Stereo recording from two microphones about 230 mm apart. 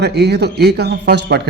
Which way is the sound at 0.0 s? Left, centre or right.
Right.